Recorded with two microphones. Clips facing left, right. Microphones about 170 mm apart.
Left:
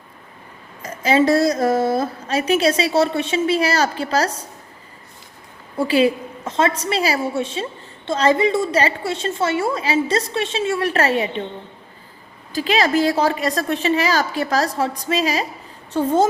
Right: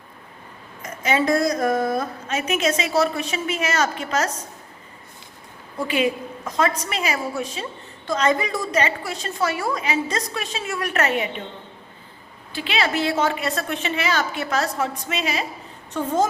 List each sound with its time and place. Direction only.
0.8 s a woman's voice: 30° left (ahead or behind)
5.7 s a woman's voice: 30° left (ahead or behind)
12.5 s a woman's voice: 40° left (ahead or behind)